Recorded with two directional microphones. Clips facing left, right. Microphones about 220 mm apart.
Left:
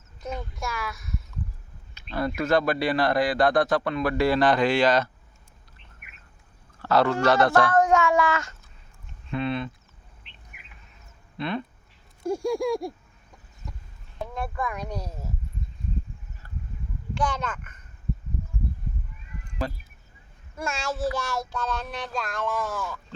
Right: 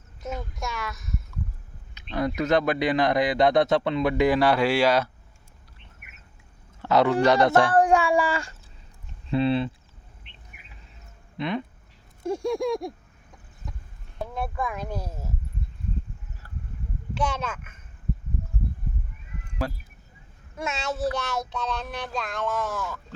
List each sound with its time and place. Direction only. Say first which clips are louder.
0.2 s speech: even; centre (ahead or behind)
2.1 s a man's voice: right 1 dB; 20° right (ahead or behind)
4.1 s speech: even; 10° right (ahead or behind)
6.8 s speech: right 1 dB; 20° right (ahead or behind)
8.3 s speech: left 1 dB; 30° right (ahead or behind)
11.3 s speech: right 1 dB; 15° right (ahead or behind)
12.2 s speech: even; centre (ahead or behind)
14.2 s speech: right 1 dB; centre (ahead or behind)
17.2 s speech: even; 5° right (ahead or behind)
19.6 s speech: right 1 dB; 10° right (ahead or behind)